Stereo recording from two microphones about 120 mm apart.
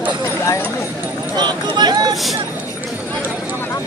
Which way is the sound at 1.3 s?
35° right (ahead or behind).